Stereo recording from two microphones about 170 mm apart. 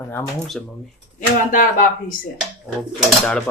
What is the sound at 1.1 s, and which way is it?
Speech, 50° left (ahead or behind).